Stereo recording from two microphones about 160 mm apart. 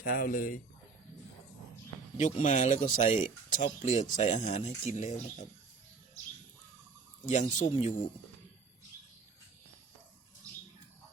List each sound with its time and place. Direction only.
0.0 s speech: 60° left (ahead or behind)
2.1 s speech: 50° left (ahead or behind)
7.3 s speech: 50° left (ahead or behind)